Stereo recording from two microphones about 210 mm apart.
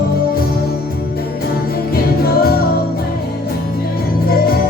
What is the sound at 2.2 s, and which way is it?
Music, 45° left (ahead or behind).